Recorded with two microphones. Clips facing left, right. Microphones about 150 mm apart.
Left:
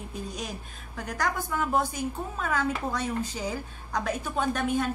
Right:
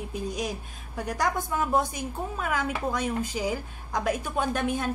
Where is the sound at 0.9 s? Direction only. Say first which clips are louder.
Right 3 dB; 10° right (ahead or behind).